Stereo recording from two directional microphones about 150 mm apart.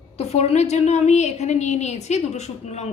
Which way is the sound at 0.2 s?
45° left (ahead or behind).